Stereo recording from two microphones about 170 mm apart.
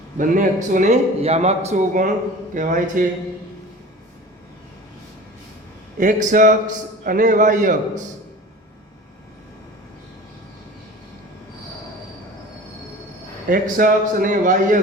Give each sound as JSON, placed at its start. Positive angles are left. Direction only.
{"t": 0.2, "sound": "a man's voice", "side_deg": -50}
{"t": 6.0, "sound": "a man's voice", "side_deg": -50}
{"t": 13.5, "sound": "a man's voice", "side_deg": -55}